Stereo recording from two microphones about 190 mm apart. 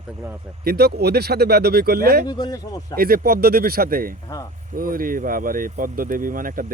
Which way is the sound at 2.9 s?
50° right (ahead or behind).